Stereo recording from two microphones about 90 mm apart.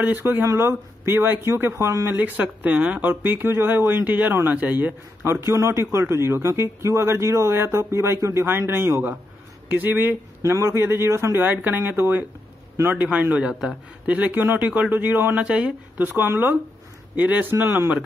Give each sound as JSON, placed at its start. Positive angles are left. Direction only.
{"t": 0.1, "sound": "speech", "side_deg": -25}
{"t": 2.2, "sound": "speech", "side_deg": -20}
{"t": 9.7, "sound": "speech", "side_deg": -20}
{"t": 10.4, "sound": "a man's voice", "side_deg": -30}
{"t": 11.4, "sound": "a man's voice", "side_deg": -20}